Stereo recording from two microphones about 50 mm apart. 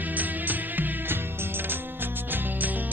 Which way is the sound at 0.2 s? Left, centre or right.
Right.